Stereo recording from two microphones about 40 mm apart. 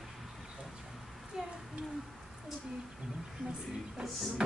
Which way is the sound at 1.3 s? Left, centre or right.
Centre.